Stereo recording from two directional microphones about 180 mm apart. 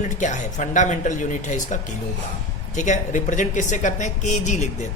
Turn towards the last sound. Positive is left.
turn(degrees=40)  # may be behind; listen again after turning